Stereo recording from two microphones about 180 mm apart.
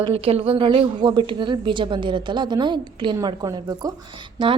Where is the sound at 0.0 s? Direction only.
30° right (ahead or behind).